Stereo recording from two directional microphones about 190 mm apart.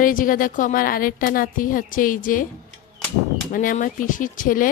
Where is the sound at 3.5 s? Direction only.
45° left (ahead or behind).